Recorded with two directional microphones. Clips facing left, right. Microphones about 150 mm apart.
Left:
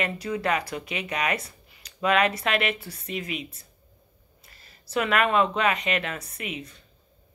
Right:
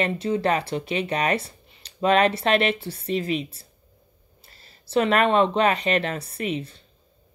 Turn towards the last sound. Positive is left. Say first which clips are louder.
# right 8 dB
turn(degrees=-30)  # may be behind; listen again after turning